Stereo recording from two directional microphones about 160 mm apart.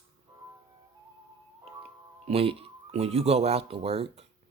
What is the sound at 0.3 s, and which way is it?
Music, 20° right (ahead or behind).